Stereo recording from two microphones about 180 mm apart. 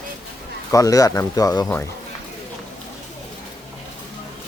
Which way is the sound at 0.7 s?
20° left (ahead or behind).